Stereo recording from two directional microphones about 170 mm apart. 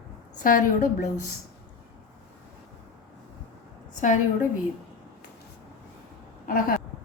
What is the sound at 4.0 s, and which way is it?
Speech, 50° left (ahead or behind).